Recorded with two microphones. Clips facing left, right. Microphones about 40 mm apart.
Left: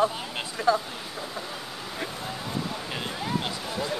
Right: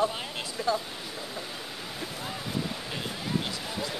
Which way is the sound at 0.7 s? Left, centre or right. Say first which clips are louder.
Left 3 dB; centre.